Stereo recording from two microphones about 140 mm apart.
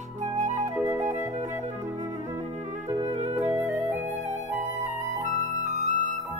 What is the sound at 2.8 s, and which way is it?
Music, 20° right (ahead or behind).